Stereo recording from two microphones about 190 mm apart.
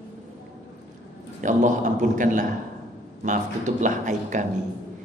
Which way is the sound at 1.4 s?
45° right (ahead or behind).